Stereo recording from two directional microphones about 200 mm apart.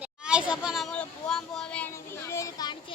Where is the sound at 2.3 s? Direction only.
15° left (ahead or behind).